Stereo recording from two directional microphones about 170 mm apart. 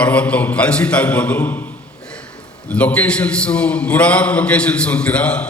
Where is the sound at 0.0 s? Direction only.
10° left (ahead or behind).